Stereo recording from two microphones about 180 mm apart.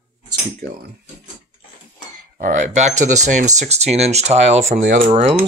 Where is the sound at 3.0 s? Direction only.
40° right (ahead or behind).